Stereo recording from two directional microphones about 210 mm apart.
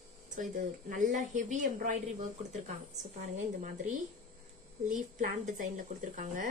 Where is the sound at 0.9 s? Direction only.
35° right (ahead or behind).